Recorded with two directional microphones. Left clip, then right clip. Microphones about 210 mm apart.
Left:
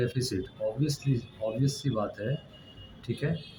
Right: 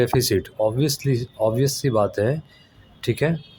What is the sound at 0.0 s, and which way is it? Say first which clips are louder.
Speech: right 12 dB; 50° right (ahead or behind).